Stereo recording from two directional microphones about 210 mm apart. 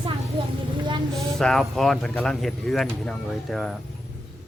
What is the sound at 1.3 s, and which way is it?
Speech, centre (ahead or behind).